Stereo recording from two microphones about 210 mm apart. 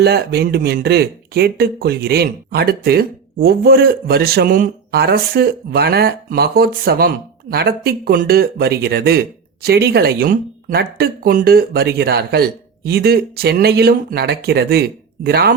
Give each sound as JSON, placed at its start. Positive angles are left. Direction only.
{"t": 0.0, "sound": "speech", "side_deg": -50}